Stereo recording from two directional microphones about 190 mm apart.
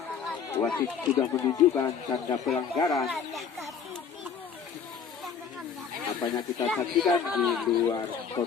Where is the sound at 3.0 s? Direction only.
Centre (ahead or behind).